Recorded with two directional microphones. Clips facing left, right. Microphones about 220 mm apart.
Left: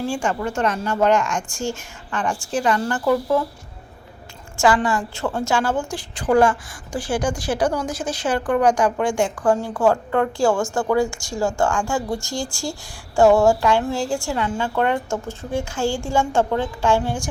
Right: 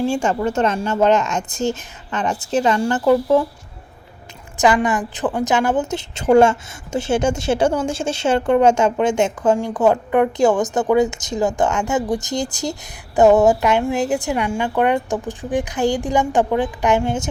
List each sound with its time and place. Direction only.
0.1 s a woman's voice: 25° right (ahead or behind)
4.5 s a woman's voice: 20° right (ahead or behind)